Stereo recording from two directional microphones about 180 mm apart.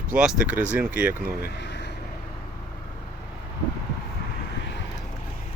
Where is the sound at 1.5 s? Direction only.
75° left (ahead or behind).